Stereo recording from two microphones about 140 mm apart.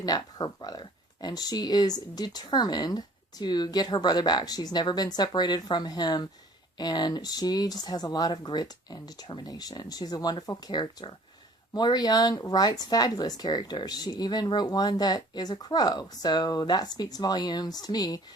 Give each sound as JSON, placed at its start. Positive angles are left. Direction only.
{"t": 0.0, "sound": "speech", "side_deg": 30}